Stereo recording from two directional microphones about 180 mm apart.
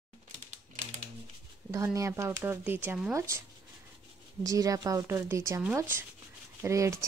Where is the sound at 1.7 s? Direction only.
15° right (ahead or behind).